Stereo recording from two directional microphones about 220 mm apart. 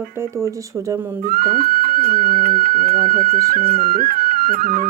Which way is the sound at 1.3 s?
40° right (ahead or behind).